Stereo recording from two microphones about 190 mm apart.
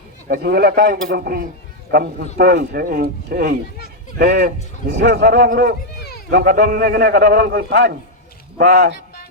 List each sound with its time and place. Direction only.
0.3 s a man's voice: 55° right (ahead or behind)